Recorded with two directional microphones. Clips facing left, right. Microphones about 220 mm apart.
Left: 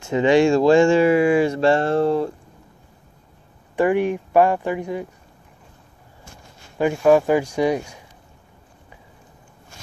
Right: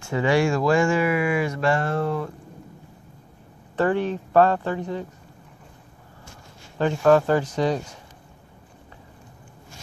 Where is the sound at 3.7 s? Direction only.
15° left (ahead or behind).